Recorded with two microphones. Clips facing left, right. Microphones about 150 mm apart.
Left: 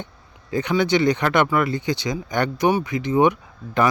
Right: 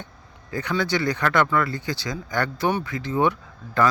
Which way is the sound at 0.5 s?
20° left (ahead or behind).